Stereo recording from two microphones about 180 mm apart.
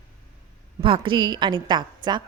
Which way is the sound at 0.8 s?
30° right (ahead or behind).